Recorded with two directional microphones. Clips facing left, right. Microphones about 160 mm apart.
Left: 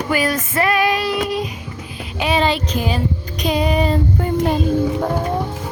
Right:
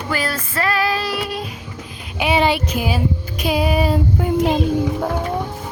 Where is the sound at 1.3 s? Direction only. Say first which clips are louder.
Left 5 dB; 10° left (ahead or behind).